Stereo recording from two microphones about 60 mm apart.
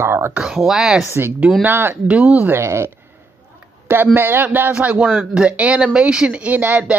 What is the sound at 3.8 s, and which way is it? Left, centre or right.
Speech, right.